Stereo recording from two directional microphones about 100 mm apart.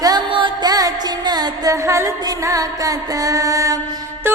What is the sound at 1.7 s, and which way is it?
Music, 30° right (ahead or behind).